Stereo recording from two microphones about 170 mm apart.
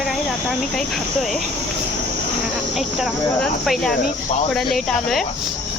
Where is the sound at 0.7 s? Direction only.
Centre (ahead or behind).